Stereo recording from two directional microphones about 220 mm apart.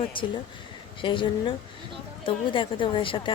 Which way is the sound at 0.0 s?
20° left (ahead or behind).